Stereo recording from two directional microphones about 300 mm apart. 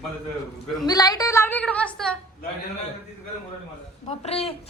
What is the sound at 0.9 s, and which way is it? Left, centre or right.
A woman's voice, centre.